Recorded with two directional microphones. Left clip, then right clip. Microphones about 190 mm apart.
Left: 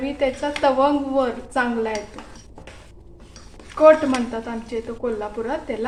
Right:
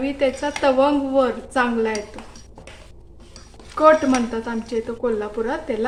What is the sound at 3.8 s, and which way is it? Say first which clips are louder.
A woman's voice: left 1 dB; 15° right (ahead or behind).